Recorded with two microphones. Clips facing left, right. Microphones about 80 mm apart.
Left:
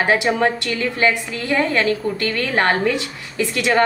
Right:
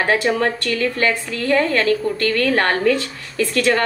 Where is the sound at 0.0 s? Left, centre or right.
Centre.